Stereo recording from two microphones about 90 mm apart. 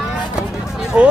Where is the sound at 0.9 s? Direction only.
10° right (ahead or behind).